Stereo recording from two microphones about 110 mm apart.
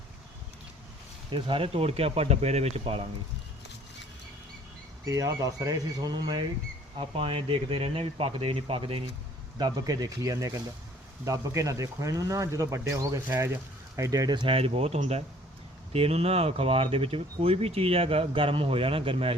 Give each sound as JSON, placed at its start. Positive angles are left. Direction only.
{"t": 1.3, "sound": "speech", "side_deg": -55}
{"t": 5.0, "sound": "speech", "side_deg": -30}
{"t": 6.9, "sound": "speech", "side_deg": -55}
{"t": 9.6, "sound": "speech", "side_deg": -40}